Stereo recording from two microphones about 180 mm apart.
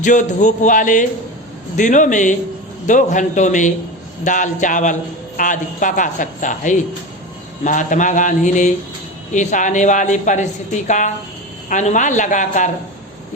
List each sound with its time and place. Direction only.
0.0 s a woman's voice: 45° left (ahead or behind)